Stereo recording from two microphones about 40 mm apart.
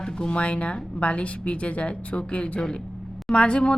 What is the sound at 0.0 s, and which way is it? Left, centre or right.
A woman's voice, left.